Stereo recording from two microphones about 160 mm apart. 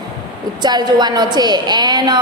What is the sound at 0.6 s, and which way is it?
A woman's voice, 25° right (ahead or behind).